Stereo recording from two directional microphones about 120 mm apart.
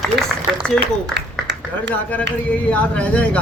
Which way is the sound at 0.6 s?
5° left (ahead or behind).